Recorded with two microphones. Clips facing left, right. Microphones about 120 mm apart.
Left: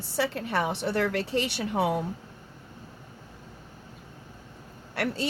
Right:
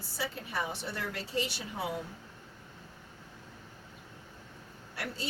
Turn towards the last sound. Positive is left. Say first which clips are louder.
# left 9 dB
turn(degrees=70)  # may be behind; listen again after turning